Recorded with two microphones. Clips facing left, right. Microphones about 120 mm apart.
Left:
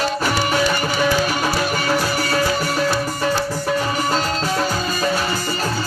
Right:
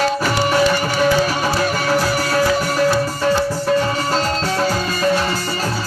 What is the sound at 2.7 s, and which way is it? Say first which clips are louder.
Music: right 4 dB; 40° right (ahead or behind).